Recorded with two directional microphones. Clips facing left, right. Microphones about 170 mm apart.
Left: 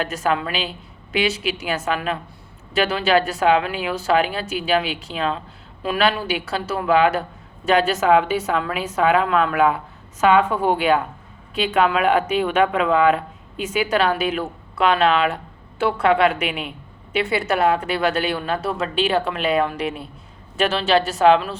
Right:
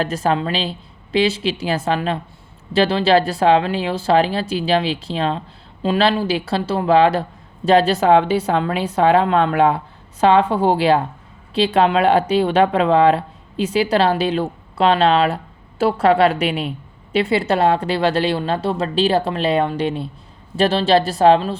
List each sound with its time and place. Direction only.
0.0 s speech: 35° right (ahead or behind)